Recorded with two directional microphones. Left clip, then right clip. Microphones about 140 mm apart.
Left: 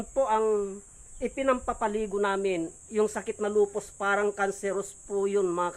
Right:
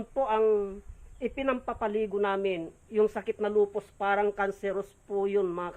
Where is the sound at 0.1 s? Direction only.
30° left (ahead or behind).